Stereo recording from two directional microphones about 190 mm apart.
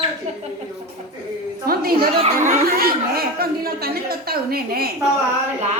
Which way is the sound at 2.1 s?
30° right (ahead or behind).